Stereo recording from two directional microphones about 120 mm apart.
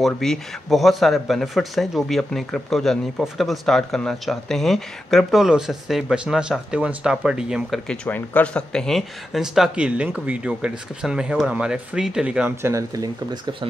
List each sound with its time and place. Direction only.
0.0 s speech: centre (ahead or behind)
7.9 s speech: 10° left (ahead or behind); by 12.5 s 10° right (ahead or behind)
12.6 s speech: 25° right (ahead or behind)